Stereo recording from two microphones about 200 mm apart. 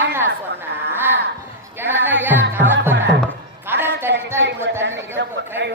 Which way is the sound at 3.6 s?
10° right (ahead or behind).